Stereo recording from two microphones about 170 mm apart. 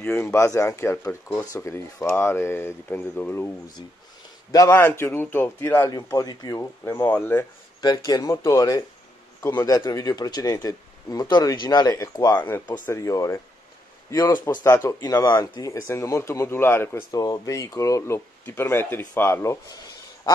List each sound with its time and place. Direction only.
0.0 s speech: 15° left (ahead or behind)
7.8 s speech: 20° left (ahead or behind)